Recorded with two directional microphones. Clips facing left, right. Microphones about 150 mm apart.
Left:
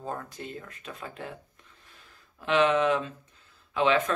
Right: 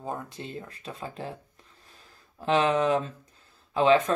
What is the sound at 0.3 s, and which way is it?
Speech, 25° right (ahead or behind).